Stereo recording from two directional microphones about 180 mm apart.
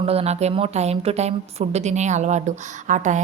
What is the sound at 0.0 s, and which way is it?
A woman's voice, 35° right (ahead or behind).